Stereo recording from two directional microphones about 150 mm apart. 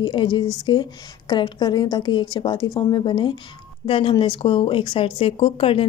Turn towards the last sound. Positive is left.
turn(degrees=35)  # may be behind; listen again after turning